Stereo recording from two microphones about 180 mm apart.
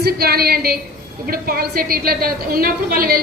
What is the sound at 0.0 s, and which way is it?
A woman's voice, 60° right (ahead or behind).